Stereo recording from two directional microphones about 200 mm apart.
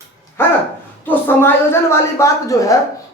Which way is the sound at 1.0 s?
10° left (ahead or behind).